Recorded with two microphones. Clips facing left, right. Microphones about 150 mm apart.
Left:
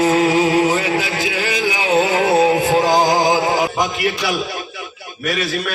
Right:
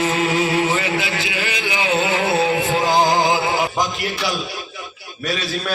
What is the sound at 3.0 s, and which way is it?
Music, 10° left (ahead or behind).